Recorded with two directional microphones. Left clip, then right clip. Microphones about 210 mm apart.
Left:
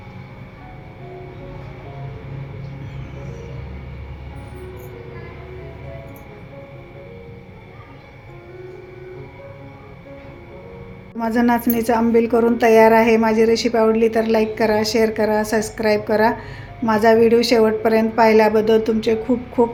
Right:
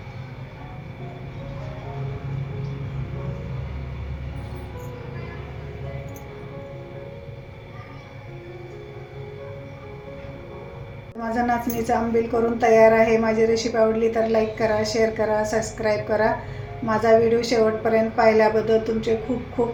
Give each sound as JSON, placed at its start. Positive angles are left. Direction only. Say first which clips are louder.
{"t": 11.2, "sound": "a woman's voice", "louder": "left 4 dB", "side_deg": 50}